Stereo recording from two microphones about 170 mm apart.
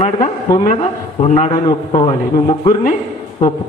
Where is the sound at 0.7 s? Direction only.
45° left (ahead or behind).